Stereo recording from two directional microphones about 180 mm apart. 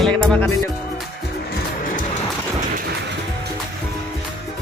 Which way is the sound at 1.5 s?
50° left (ahead or behind).